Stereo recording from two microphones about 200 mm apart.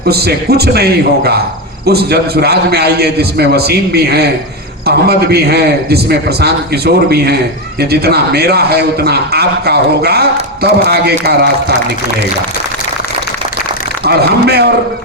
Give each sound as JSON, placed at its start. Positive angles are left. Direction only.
{"t": 0.0, "sound": "a man's voice", "side_deg": -50}
{"t": 14.0, "sound": "a man's voice", "side_deg": -55}